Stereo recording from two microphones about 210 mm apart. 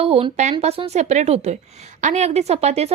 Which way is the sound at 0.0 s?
25° right (ahead or behind).